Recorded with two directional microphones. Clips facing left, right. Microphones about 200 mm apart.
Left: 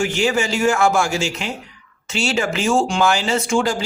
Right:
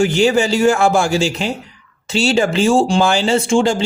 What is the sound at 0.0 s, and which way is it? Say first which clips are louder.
Speech: right 6 dB; 35° right (ahead or behind).